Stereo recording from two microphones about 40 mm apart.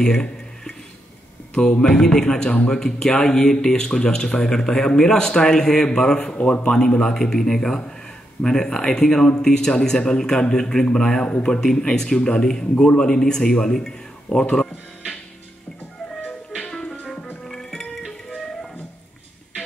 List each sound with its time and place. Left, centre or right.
0.0 s a sound: centre
1.5 s a man's voice: left
6.3 s speech: left
6.7 s a man's voice: centre
16.8 s music: left
17.5 s music: centre